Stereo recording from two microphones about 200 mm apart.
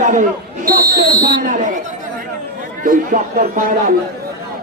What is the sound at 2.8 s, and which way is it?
Speech, 40° right (ahead or behind).